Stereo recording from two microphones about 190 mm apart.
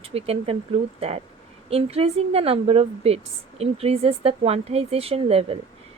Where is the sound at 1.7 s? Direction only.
30° right (ahead or behind).